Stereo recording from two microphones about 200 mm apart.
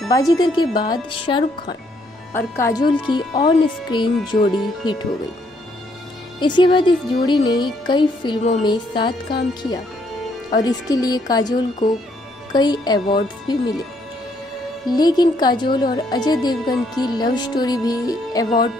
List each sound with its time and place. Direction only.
0.1 s speech: 20° left (ahead or behind)
6.4 s speech: 25° left (ahead or behind)
14.9 s speech: 20° left (ahead or behind)